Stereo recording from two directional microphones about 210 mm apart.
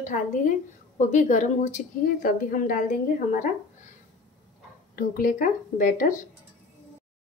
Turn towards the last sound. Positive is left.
turn(degrees=40)  # may be behind; listen again after turning